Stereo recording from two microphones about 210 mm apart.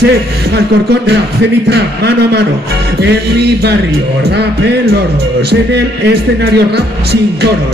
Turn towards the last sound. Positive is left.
turn(degrees=-50)  # may be behind; listen again after turning